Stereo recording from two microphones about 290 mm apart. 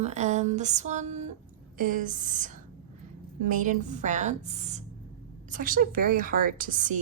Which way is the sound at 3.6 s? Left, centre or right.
Right.